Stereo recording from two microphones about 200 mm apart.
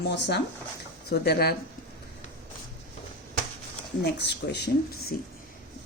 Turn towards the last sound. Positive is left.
turn(degrees=55)  # may be behind; listen again after turning